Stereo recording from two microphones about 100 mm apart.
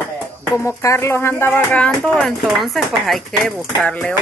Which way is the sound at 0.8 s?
25° left (ahead or behind).